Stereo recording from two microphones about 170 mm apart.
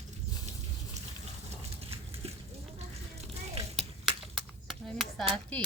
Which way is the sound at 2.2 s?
35° right (ahead or behind).